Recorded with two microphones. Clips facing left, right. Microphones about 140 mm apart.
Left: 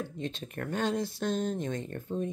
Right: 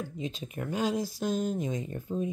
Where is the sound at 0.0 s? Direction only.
5° right (ahead or behind).